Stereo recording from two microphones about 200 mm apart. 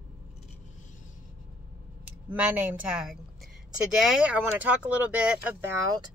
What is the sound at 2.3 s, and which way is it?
Speech, 5° right (ahead or behind).